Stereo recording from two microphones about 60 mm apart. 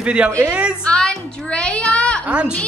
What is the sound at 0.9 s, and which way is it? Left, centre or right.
A child's voice, centre.